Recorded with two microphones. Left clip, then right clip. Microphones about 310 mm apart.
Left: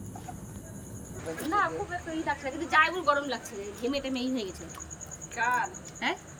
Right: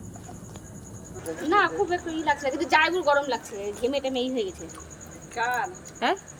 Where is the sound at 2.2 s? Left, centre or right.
Centre.